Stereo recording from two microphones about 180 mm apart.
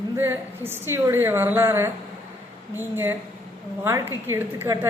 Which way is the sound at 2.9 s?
10° right (ahead or behind).